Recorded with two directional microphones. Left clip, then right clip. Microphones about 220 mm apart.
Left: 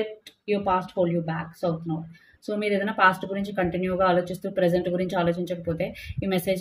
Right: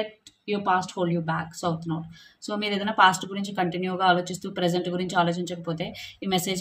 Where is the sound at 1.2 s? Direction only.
20° right (ahead or behind).